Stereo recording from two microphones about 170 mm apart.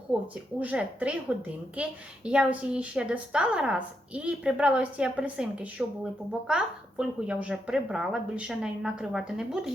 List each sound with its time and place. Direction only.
0.6 s a woman's voice: 10° right (ahead or behind)